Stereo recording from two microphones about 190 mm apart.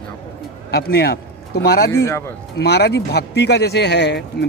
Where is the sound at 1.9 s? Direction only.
15° left (ahead or behind).